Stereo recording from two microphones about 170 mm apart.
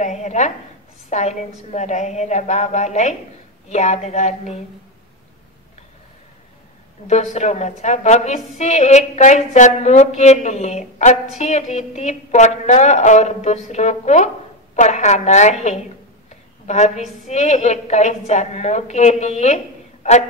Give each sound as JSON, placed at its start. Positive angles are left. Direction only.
{"t": 0.0, "sound": "a woman's voice", "side_deg": 40}
{"t": 7.1, "sound": "a woman's voice", "side_deg": 45}
{"t": 16.6, "sound": "a woman's voice", "side_deg": 40}